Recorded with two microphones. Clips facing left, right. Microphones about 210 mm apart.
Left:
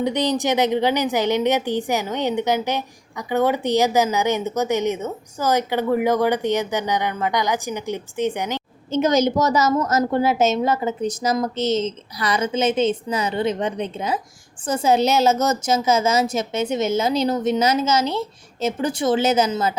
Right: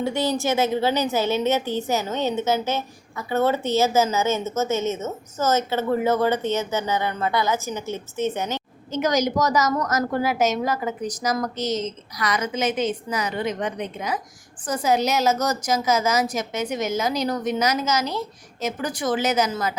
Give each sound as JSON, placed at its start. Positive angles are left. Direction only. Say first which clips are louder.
{"t": 0.0, "sound": "a woman's voice", "louder": "left 2 dB", "side_deg": 20}
{"t": 8.9, "sound": "a woman's voice", "louder": "left 4 dB", "side_deg": 25}